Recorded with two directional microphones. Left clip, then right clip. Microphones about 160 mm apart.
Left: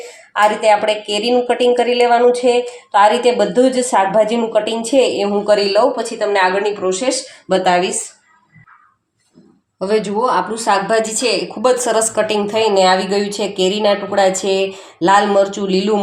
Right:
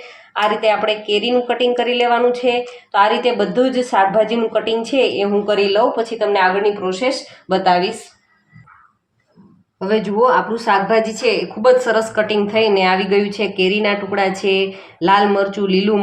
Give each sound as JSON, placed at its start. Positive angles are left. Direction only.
{"t": 0.4, "sound": "a woman's voice", "side_deg": 20}
{"t": 9.7, "sound": "a woman's voice", "side_deg": 40}